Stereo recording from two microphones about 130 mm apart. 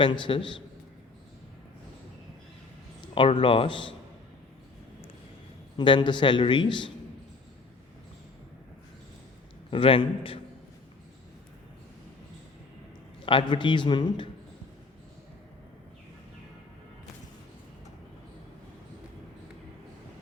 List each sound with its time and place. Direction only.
0.0 s a man's voice: 40° left (ahead or behind)
3.2 s a man's voice: 40° left (ahead or behind)
5.7 s a man's voice: 35° left (ahead or behind)
9.6 s a man's voice: 45° left (ahead or behind)
13.2 s a man's voice: 40° left (ahead or behind)